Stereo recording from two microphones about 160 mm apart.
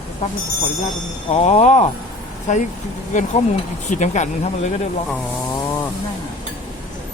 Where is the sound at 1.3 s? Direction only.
40° left (ahead or behind).